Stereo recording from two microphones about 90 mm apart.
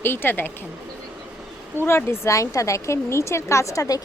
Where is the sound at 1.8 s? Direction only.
30° left (ahead or behind).